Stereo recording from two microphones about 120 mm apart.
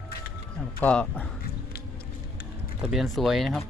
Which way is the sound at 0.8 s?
10° left (ahead or behind).